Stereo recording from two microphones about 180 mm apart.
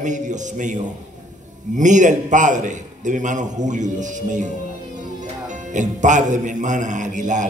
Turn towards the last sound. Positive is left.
turn(degrees=-45)  # may be behind; listen again after turning